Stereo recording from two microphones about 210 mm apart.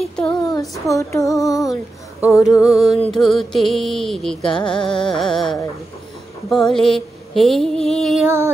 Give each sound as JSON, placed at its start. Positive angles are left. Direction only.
{"t": 0.0, "sound": "child singing", "side_deg": 5}
{"t": 0.3, "sound": "child singing", "side_deg": 20}
{"t": 1.1, "sound": "music", "side_deg": 0}
{"t": 1.4, "sound": "female singing", "side_deg": 15}
{"t": 2.6, "sound": "music", "side_deg": 0}